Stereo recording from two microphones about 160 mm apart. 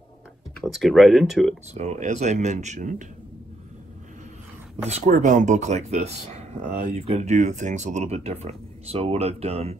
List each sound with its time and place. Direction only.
0.6 s speech: centre (ahead or behind)
1.7 s speech: 45° right (ahead or behind)
4.8 s speech: 45° right (ahead or behind)